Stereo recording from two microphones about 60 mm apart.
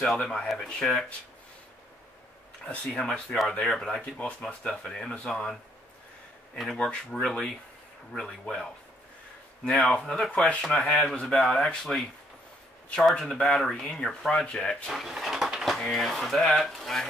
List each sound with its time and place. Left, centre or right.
0.0 s speech: centre
2.6 s speech: centre
4.0 s speech: left
6.8 s speech: centre
9.9 s speech: centre
13.2 s speech: centre
14.9 s speech: centre